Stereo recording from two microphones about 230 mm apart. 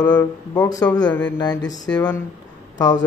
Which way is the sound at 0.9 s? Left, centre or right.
Centre.